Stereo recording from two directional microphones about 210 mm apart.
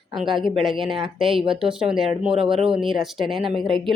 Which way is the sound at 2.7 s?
Centre (ahead or behind).